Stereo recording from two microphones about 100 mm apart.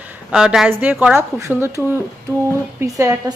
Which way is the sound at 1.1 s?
25° right (ahead or behind).